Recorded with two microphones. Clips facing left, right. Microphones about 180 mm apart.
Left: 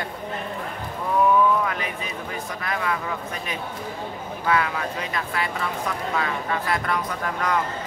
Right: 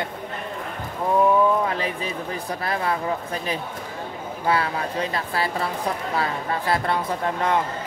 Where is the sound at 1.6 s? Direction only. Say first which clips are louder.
Right 3 dB; 30° right (ahead or behind).